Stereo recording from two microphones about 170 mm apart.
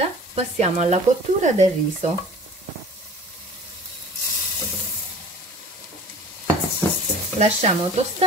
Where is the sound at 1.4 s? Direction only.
45° right (ahead or behind).